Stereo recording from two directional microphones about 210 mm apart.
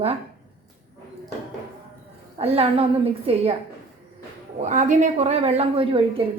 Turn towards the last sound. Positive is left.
turn(degrees=-25)  # may be behind; listen again after turning